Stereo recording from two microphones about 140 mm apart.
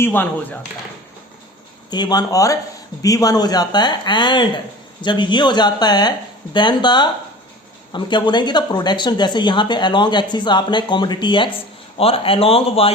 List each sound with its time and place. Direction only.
0.0 s speech: 15° left (ahead or behind)
1.9 s speech: 30° left (ahead or behind)